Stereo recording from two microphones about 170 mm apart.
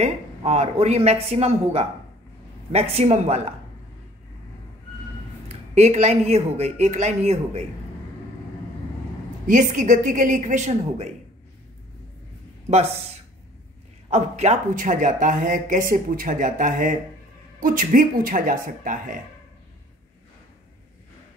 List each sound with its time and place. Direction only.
0.0 s speech: 40° right (ahead or behind)
5.5 s speech: 40° right (ahead or behind)
9.5 s speech: 50° right (ahead or behind)
12.6 s speech: 40° right (ahead or behind)